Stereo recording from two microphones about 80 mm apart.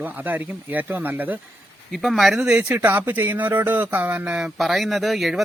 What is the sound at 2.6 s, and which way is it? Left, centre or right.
Speech, right.